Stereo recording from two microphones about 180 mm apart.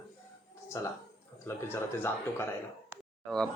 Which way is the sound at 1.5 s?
15° left (ahead or behind).